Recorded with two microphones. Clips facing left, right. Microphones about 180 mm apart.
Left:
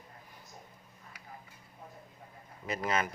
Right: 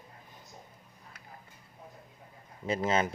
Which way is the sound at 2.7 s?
25° right (ahead or behind).